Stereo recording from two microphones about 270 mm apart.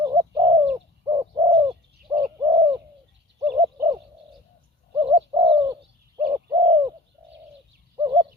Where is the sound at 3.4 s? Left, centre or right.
Centre.